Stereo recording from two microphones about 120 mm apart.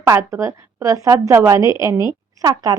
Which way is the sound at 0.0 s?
25° right (ahead or behind).